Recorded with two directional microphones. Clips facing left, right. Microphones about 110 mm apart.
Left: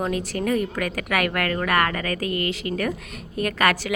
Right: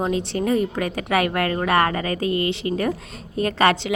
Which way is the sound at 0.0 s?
25° right (ahead or behind).